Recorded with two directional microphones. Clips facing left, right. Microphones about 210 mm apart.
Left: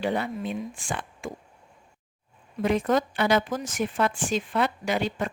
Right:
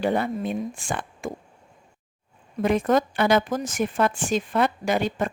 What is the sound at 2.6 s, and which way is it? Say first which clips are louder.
Speech: right 3 dB; 50° right (ahead or behind).